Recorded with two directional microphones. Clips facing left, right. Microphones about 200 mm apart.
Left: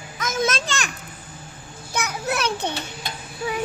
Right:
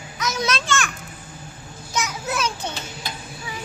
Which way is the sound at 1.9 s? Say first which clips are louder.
Left 1 dB; 60° left (ahead or behind).